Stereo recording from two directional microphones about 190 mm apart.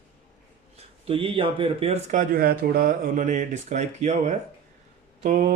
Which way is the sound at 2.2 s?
50° right (ahead or behind).